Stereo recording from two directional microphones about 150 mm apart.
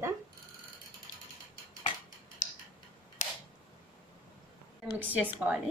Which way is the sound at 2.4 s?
55° left (ahead or behind).